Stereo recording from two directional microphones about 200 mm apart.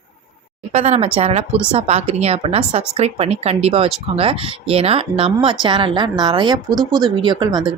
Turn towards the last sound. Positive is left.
turn(degrees=-20)  # may be behind; listen again after turning